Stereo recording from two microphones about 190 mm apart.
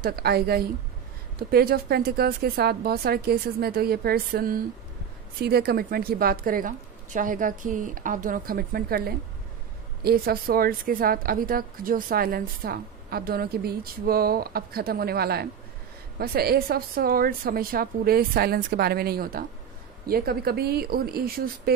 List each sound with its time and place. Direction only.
0.0 s a woman's voice: 55° right (ahead or behind)